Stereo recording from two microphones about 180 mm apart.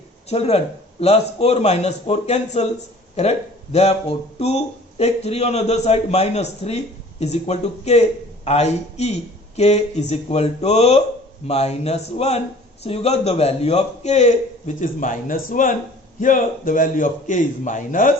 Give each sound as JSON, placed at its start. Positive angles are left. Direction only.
{"t": 0.3, "sound": "a man's voice", "side_deg": 35}